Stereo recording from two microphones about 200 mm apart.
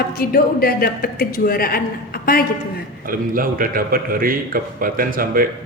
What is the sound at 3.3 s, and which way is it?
A man's voice, 45° right (ahead or behind).